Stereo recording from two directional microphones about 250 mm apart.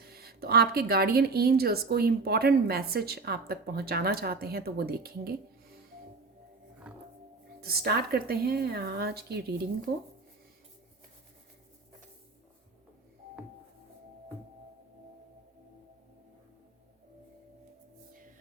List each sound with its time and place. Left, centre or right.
0.0 s speech: right
7.6 s speech: right